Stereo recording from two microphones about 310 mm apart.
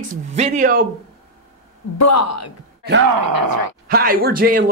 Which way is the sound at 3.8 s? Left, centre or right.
Right.